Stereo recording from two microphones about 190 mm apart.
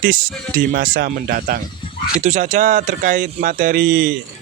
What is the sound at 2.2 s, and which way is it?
Speech, 40° right (ahead or behind).